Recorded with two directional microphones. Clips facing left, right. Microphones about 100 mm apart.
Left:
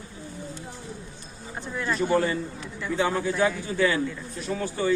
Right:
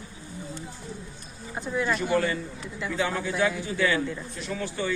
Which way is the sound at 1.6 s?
10° right (ahead or behind).